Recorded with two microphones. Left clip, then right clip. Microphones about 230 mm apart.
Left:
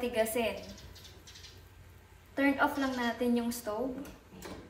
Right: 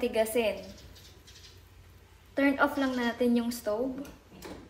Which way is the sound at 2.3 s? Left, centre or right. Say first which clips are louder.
Right 3 dB; right.